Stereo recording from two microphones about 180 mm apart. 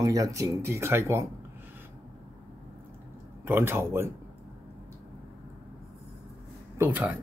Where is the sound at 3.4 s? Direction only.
15° right (ahead or behind).